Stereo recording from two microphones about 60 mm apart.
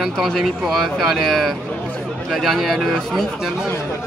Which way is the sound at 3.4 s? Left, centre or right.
Centre.